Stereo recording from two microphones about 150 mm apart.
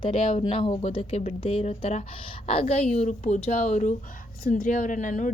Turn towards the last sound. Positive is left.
turn(degrees=55)  # may be behind; listen again after turning